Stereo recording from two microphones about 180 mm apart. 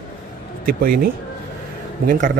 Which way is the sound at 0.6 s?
55° right (ahead or behind).